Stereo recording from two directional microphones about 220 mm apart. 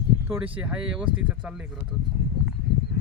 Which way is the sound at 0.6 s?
5° right (ahead or behind).